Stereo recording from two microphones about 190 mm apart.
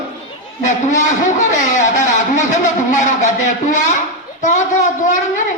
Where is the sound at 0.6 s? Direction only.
40° left (ahead or behind).